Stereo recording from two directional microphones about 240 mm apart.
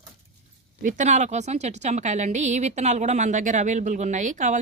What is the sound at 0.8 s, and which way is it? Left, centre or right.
A woman's voice, right.